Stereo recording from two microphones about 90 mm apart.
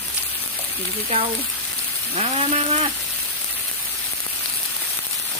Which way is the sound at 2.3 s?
90° right.